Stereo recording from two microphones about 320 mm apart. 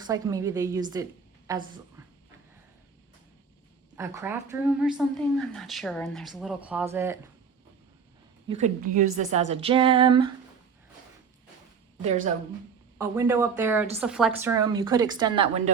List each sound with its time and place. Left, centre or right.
0.0 s a woman's voice: centre
3.9 s a woman's voice: centre
8.4 s a woman's voice: right
12.0 s speech: right
13.0 s a woman's voice: centre